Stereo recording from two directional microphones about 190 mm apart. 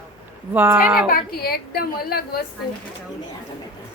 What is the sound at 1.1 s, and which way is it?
A woman's voice, 50° left (ahead or behind).